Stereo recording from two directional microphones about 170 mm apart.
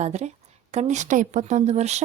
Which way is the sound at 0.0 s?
40° right (ahead or behind).